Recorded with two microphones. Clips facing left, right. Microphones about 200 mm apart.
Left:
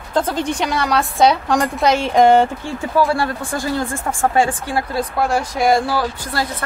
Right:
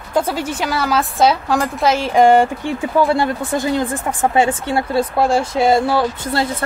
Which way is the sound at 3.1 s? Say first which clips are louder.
Right 3 dB; 20° right (ahead or behind).